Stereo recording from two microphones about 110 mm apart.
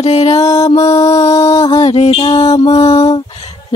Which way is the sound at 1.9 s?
60° left (ahead or behind).